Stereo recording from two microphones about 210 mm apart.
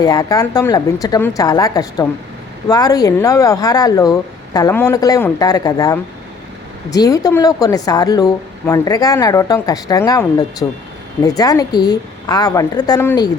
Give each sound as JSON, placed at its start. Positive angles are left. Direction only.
{"t": 0.0, "sound": "speech", "side_deg": 15}